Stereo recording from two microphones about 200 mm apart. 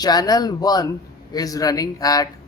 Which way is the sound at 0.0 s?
20° left (ahead or behind).